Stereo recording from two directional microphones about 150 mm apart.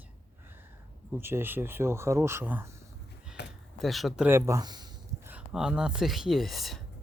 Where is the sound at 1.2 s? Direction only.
15° right (ahead or behind).